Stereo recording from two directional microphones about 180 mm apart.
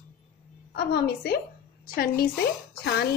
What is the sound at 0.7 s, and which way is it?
Speech, 65° left (ahead or behind).